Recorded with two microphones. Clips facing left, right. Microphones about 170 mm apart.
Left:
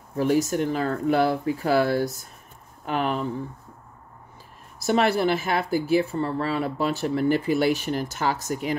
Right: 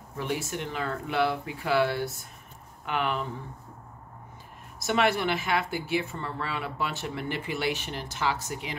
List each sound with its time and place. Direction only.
0.2 s speech: 40° left (ahead or behind)
4.8 s speech: 40° left (ahead or behind)